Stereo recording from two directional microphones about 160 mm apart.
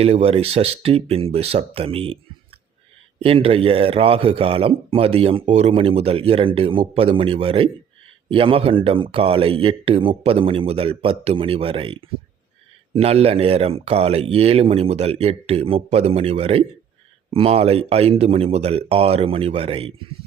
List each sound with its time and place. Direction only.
0.0 s a man's voice: 40° right (ahead or behind)
3.2 s a man's voice: 35° right (ahead or behind)